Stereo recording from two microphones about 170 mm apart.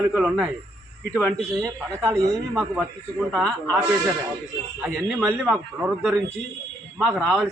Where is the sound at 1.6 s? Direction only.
20° right (ahead or behind).